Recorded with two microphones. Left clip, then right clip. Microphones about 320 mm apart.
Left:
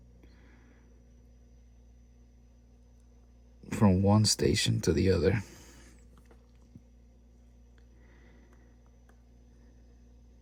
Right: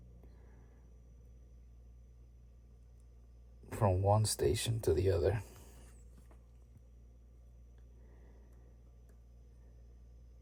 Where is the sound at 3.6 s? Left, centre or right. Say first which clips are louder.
Left 4 dB; left.